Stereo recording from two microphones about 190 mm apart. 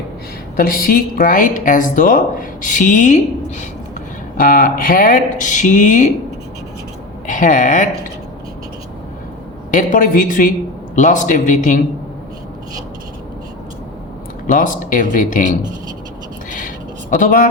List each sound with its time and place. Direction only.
0.5 s a woman's voice: 50° left (ahead or behind)
4.4 s a woman's voice: 50° left (ahead or behind)
7.3 s a woman's voice: 45° left (ahead or behind)
9.7 s a woman's voice: 45° left (ahead or behind)
14.4 s a woman's voice: 45° left (ahead or behind)
16.5 s a sound: 45° left (ahead or behind)